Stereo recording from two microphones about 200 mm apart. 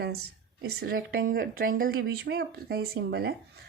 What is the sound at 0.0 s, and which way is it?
Speech, 55° right (ahead or behind).